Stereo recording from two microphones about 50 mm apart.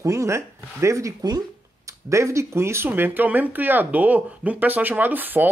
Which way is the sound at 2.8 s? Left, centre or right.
Right.